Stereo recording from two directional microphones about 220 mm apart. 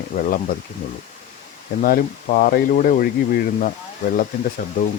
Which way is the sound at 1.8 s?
40° left (ahead or behind).